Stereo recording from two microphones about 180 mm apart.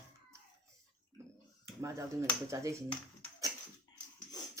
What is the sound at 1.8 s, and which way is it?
Speech, 15° right (ahead or behind).